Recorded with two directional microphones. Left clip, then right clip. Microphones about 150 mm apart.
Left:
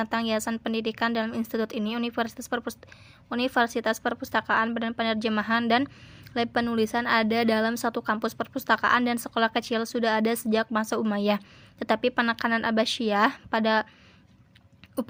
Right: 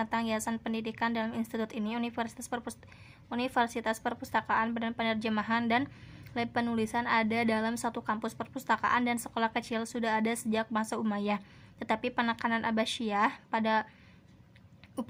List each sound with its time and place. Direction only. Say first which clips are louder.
0.0 s a woman's voice: left 5 dB; 30° left (ahead or behind)